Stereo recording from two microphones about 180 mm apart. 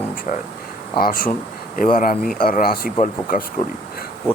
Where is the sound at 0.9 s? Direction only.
55° left (ahead or behind).